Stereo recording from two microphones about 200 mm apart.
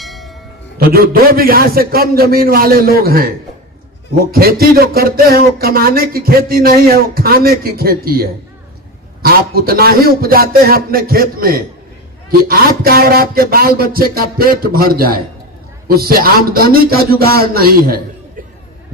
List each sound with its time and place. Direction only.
0.0 s music: centre (ahead or behind)
0.8 s speech: 50° right (ahead or behind)